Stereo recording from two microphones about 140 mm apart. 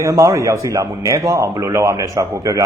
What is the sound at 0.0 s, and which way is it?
Speech, 20° right (ahead or behind).